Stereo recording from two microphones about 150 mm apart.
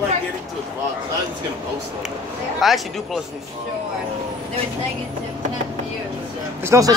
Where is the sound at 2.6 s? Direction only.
Centre (ahead or behind).